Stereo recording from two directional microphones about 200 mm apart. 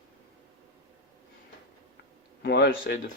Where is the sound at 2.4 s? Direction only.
55° left (ahead or behind).